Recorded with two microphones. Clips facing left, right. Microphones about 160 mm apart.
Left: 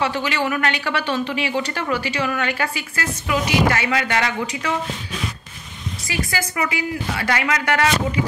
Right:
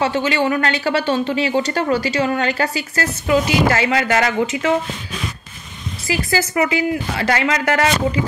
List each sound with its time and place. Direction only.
0.0 s speech: 25° right (ahead or behind)
6.0 s speech: 30° right (ahead or behind)